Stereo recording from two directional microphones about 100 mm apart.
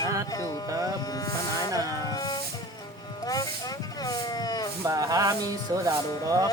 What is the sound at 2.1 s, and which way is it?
Music, 45° left (ahead or behind).